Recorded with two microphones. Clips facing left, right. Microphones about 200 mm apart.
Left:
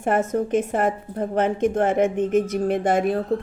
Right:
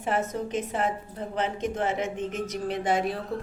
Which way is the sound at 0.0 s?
50° left (ahead or behind).